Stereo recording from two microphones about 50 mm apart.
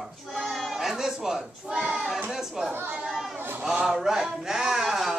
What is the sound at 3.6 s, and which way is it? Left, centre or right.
Speech, centre.